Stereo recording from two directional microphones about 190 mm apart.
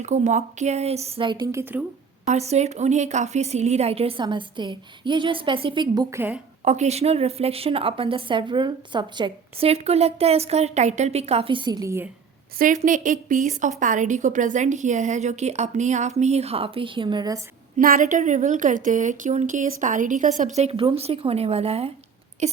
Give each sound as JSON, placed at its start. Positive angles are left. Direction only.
{"t": 0.0, "sound": "a woman's voice", "side_deg": -40}
{"t": 2.2, "sound": "a woman's voice", "side_deg": -35}
{"t": 6.7, "sound": "a woman's voice", "side_deg": -35}
{"t": 12.5, "sound": "a woman's voice", "side_deg": -40}
{"t": 17.7, "sound": "a woman's voice", "side_deg": -45}